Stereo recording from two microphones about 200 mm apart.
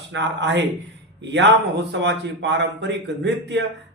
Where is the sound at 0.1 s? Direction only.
60° right (ahead or behind).